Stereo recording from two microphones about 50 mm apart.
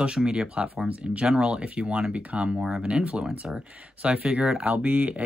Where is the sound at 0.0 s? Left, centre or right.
Centre.